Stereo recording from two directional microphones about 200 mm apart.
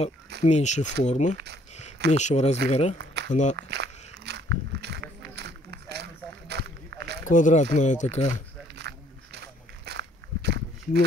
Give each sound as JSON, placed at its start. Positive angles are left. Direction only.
{"t": 0.4, "sound": "speech", "side_deg": 35}
{"t": 1.3, "sound": "speech", "side_deg": -55}
{"t": 2.1, "sound": "speech", "side_deg": 35}
{"t": 3.5, "sound": "walk", "side_deg": -55}
{"t": 6.4, "sound": "a sound", "side_deg": -55}
{"t": 7.2, "sound": "speech", "side_deg": 40}
{"t": 8.7, "sound": "a sound", "side_deg": -55}
{"t": 9.8, "sound": "walk", "side_deg": -55}